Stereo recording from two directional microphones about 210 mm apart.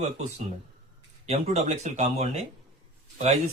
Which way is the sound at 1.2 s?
30° right (ahead or behind).